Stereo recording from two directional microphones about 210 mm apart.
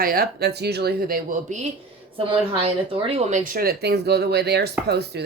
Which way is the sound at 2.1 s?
25° right (ahead or behind).